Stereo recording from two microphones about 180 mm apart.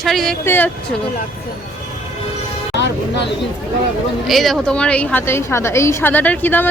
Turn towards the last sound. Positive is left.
turn(degrees=10)  # may be behind; listen again after turning